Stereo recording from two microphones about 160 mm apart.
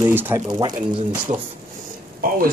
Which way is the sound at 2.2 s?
70° right (ahead or behind).